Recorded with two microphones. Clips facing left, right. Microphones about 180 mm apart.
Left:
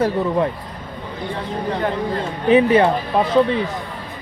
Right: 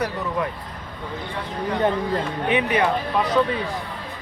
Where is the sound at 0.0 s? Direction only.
25° left (ahead or behind).